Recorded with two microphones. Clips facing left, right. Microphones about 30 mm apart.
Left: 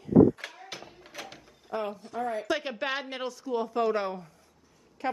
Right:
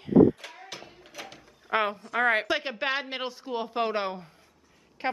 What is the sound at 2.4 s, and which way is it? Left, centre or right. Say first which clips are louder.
A woman's voice: right 2 dB; right.